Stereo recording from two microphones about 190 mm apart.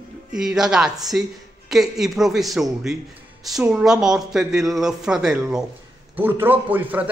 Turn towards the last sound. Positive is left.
turn(degrees=-10)  # may be behind; listen again after turning